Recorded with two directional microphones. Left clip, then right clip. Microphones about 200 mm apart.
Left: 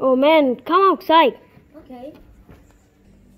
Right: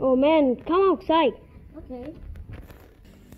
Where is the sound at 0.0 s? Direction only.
15° left (ahead or behind).